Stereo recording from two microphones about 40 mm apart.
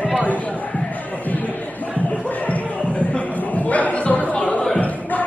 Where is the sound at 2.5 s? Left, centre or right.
Left.